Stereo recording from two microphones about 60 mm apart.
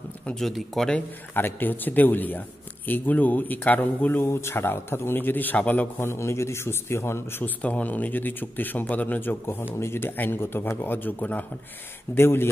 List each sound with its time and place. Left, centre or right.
0.4 s speech: centre
1.3 s speech: left
4.3 s speech: left
5.9 s a man's voice: left
7.4 s speech: left
12.2 s speech: left